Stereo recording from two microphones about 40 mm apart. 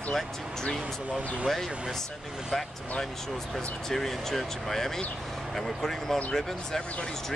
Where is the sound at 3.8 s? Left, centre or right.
Centre.